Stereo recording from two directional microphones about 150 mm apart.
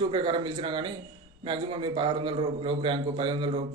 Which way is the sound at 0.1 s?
30° right (ahead or behind).